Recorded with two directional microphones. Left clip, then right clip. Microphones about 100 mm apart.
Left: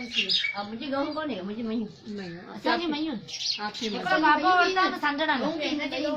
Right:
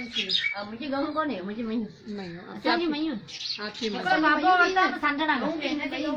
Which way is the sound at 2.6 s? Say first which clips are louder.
Right 1 dB; centre (ahead or behind).